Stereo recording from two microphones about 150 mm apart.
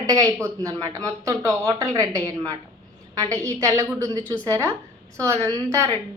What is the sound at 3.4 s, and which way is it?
A woman's voice, 20° right (ahead or behind).